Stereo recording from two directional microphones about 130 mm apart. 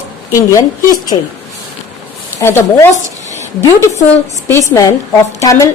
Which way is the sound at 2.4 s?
20° left (ahead or behind).